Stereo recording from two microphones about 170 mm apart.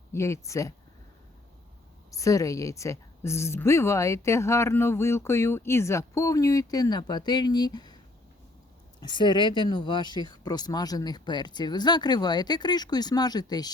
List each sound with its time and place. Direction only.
0.1 s a woman's voice: 15° left (ahead or behind)
2.0 s a woman's voice: 20° left (ahead or behind)
9.0 s a woman's voice: 25° left (ahead or behind)